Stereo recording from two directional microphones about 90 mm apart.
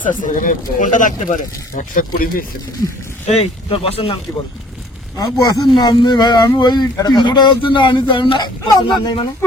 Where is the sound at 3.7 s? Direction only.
90° left.